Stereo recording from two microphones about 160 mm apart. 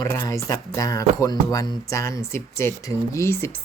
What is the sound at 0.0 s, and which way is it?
Speech, 15° left (ahead or behind).